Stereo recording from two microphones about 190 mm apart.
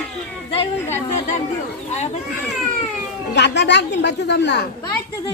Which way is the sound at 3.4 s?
65° left (ahead or behind).